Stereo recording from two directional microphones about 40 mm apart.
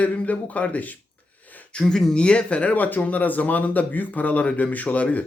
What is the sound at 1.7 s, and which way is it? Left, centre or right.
Speech, left.